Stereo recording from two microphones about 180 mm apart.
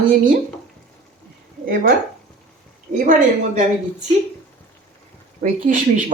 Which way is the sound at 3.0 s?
45° right (ahead or behind).